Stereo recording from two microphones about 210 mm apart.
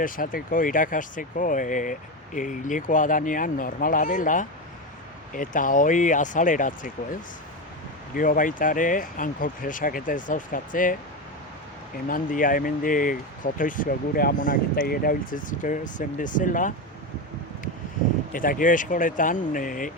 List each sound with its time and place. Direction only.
0.0 s speech: 40° left (ahead or behind)
12.0 s speech: 40° left (ahead or behind)
18.3 s speech: 40° left (ahead or behind)